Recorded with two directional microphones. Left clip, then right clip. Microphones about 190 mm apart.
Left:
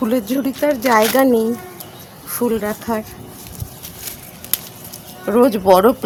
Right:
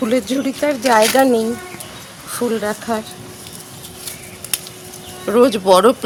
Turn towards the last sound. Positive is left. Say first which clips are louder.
# even
turn(degrees=60)  # may be behind; listen again after turning